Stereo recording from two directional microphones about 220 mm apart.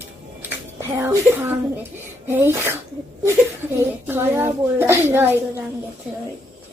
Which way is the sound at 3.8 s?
10° right (ahead or behind).